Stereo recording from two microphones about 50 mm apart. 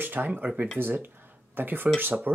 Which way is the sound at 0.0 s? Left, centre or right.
Right.